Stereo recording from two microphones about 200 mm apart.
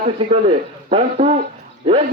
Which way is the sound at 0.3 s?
30° right (ahead or behind).